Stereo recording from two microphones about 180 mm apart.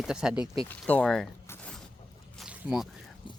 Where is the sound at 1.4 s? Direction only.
5° left (ahead or behind).